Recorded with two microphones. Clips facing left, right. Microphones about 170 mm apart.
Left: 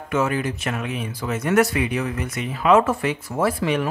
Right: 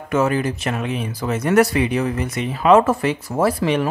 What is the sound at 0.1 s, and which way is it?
Speech, 40° right (ahead or behind).